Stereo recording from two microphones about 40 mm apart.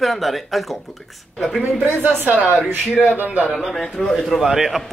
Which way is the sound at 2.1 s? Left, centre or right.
Right.